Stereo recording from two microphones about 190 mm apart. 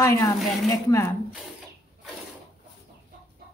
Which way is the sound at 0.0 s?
15° left (ahead or behind).